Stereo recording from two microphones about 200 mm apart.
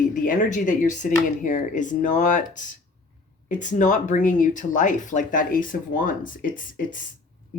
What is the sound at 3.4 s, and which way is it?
Speech, 40° left (ahead or behind).